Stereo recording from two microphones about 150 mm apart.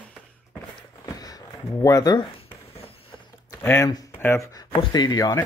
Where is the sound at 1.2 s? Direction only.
25° left (ahead or behind).